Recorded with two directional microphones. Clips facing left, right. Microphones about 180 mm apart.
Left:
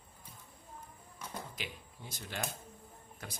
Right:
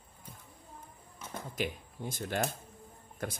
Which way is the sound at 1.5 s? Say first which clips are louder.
Right 10 dB; 50° right (ahead or behind).